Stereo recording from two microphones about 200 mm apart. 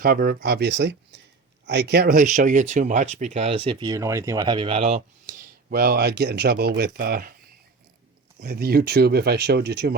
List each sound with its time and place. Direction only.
0.0 s speech: 45° right (ahead or behind)
8.4 s speech: 50° right (ahead or behind)